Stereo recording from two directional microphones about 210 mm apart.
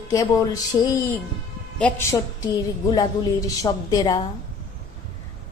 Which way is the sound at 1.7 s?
10° left (ahead or behind).